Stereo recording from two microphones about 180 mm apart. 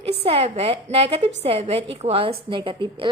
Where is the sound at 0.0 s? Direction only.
35° right (ahead or behind).